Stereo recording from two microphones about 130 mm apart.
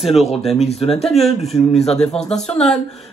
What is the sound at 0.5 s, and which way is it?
Speech, 55° left (ahead or behind).